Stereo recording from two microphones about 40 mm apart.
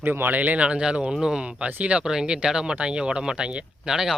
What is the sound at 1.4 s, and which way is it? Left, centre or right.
Speech, right.